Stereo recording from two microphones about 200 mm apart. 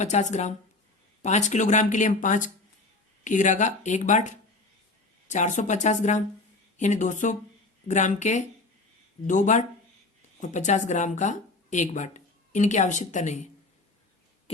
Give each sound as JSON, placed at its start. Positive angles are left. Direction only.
{"t": 0.0, "sound": "speech", "side_deg": 35}
{"t": 5.3, "sound": "speech", "side_deg": 40}